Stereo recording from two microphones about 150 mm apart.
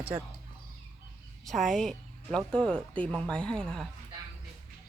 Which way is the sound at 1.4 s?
Centre (ahead or behind).